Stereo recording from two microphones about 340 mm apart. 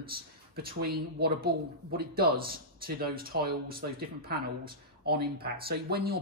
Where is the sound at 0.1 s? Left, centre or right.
Right.